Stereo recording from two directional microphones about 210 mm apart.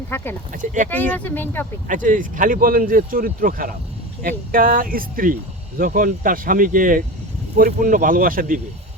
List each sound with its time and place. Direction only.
0.1 s speech: 10° left (ahead or behind)
0.5 s speech: 40° right (ahead or behind)
0.9 s speech: 10° left (ahead or behind)
1.9 s speech: 40° right (ahead or behind)